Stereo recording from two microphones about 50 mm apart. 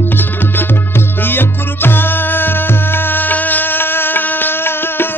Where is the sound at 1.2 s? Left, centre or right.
Left.